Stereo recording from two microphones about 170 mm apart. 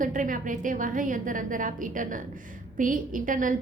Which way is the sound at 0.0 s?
50° right (ahead or behind).